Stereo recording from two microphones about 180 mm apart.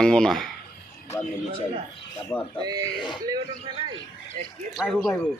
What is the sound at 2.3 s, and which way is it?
Speech, 10° left (ahead or behind).